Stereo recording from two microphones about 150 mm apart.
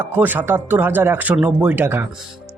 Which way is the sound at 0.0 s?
15° right (ahead or behind).